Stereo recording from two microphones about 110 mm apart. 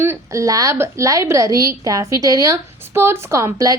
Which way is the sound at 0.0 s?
25° right (ahead or behind).